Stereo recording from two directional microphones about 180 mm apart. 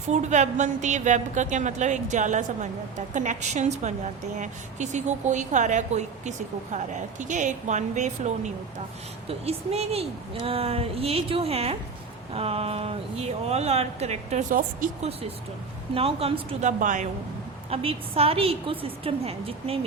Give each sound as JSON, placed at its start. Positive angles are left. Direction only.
{"t": 0.1, "sound": "a woman's voice", "side_deg": -40}
{"t": 9.5, "sound": "a woman's voice", "side_deg": -35}
{"t": 16.0, "sound": "a woman's voice", "side_deg": -30}
{"t": 17.7, "sound": "a woman's voice", "side_deg": -35}